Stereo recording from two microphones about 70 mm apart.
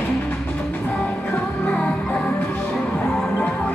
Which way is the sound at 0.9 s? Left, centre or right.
Centre.